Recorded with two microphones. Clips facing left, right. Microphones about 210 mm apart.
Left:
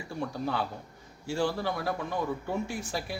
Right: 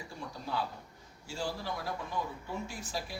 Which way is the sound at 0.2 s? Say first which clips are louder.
Left 6 dB; 65° left (ahead or behind).